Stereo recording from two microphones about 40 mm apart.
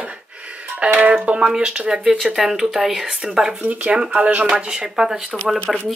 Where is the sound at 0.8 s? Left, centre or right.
Right.